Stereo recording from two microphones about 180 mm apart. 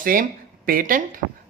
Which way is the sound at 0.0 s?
50° right (ahead or behind).